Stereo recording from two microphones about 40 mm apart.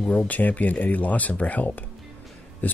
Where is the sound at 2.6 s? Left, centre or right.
Left.